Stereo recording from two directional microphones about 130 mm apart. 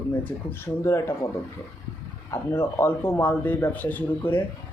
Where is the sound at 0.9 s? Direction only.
20° left (ahead or behind).